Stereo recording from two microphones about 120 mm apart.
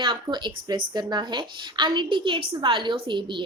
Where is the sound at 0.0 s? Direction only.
40° right (ahead or behind).